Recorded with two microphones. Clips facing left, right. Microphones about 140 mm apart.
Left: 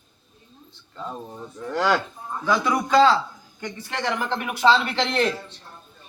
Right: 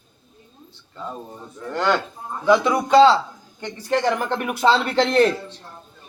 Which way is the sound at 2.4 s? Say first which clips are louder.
Right 5 dB; 20° right (ahead or behind).